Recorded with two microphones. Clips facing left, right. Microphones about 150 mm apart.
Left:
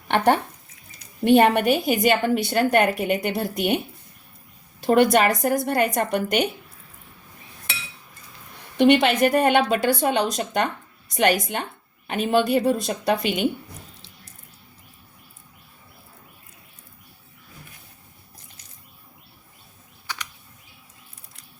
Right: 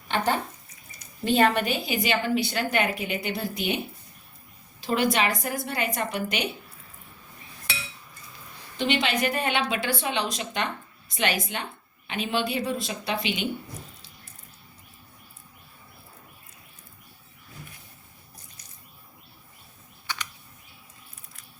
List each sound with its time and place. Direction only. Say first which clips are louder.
1.2 s a woman's voice: left 6 dB; 60° left (ahead or behind)
4.8 s a woman's voice: left 7 dB; 50° left (ahead or behind)
8.8 s a woman's voice: left 9 dB; 50° left (ahead or behind)